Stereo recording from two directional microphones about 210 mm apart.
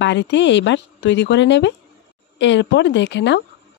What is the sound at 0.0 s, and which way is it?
Speech, 60° left (ahead or behind).